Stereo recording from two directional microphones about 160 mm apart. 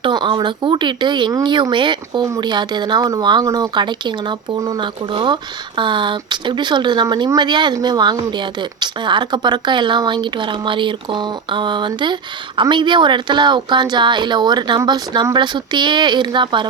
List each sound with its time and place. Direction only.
0.0 s speech: 30° right (ahead or behind)